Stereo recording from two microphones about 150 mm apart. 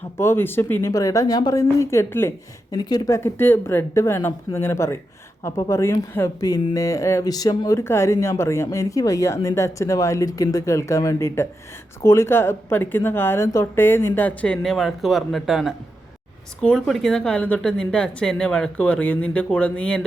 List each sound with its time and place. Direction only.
0.2 s speech: 15° left (ahead or behind)